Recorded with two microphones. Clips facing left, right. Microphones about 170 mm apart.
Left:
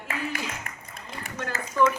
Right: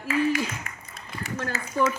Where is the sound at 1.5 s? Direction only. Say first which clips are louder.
Even; 55° left (ahead or behind).